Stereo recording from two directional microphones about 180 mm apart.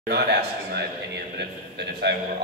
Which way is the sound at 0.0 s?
65° right (ahead or behind).